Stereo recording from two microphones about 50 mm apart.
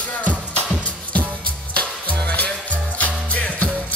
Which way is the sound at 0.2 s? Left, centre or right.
Left.